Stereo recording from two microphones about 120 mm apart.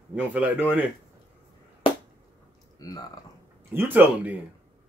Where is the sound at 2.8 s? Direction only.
30° left (ahead or behind).